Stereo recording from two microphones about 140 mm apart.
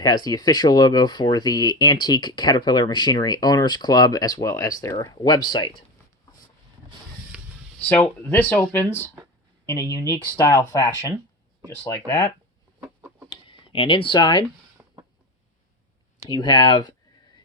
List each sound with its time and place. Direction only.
0.0 s speech: 30° left (ahead or behind)
7.8 s speech: 10° left (ahead or behind)
12.8 s chicken: 15° right (ahead or behind)
13.3 s a sound: 40° left (ahead or behind)
14.8 s a sound: 10° right (ahead or behind)
16.3 s speech: 30° left (ahead or behind)